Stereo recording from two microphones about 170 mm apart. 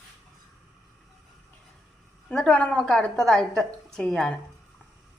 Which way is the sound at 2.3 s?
5° left (ahead or behind).